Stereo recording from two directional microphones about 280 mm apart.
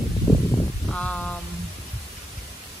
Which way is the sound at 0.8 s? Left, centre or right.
Centre.